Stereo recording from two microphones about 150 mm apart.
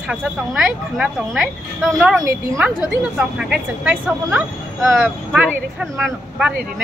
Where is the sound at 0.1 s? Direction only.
5° right (ahead or behind).